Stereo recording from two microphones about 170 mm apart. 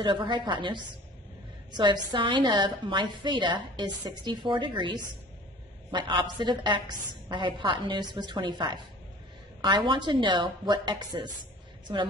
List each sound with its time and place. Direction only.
0.0 s a woman's voice: 30° right (ahead or behind)